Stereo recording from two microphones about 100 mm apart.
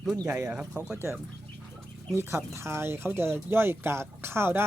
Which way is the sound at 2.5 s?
25° right (ahead or behind).